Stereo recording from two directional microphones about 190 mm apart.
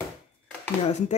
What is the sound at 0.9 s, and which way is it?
Speech, 35° left (ahead or behind).